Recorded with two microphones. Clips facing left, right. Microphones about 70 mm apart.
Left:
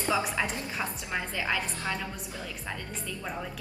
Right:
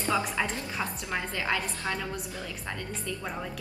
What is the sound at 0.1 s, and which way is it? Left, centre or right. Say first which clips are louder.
A woman's voice: even; centre.